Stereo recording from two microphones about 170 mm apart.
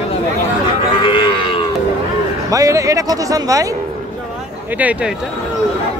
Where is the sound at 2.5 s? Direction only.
20° right (ahead or behind).